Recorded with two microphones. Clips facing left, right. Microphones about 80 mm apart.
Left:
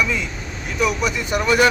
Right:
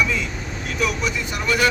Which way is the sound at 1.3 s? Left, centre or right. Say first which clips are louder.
Left 5 dB; centre.